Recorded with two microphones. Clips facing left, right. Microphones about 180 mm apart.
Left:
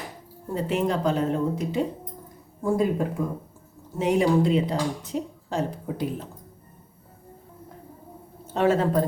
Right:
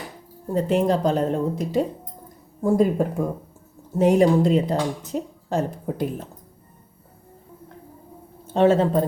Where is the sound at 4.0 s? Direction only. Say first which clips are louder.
Right 4 dB; 45° right (ahead or behind).